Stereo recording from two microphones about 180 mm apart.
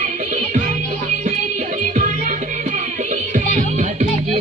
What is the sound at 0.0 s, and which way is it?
Music, 45° right (ahead or behind).